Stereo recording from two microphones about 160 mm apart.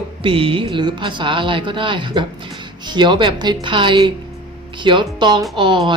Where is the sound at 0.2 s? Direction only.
35° right (ahead or behind).